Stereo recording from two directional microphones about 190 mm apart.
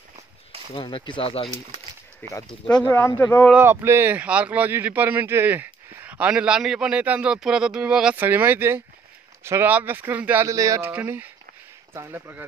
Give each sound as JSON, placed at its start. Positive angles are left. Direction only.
{"t": 0.7, "sound": "speech", "side_deg": 25}
{"t": 2.2, "sound": "speech", "side_deg": 10}
{"t": 3.4, "sound": "speech", "side_deg": -10}